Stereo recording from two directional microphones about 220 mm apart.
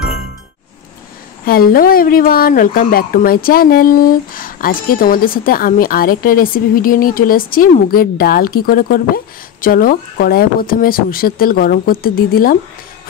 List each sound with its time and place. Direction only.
1.4 s speech: 40° left (ahead or behind)